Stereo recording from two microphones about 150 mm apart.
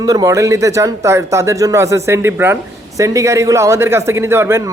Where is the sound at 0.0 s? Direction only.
25° right (ahead or behind).